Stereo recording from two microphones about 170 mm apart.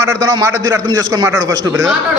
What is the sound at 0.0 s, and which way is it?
Speech, 20° right (ahead or behind).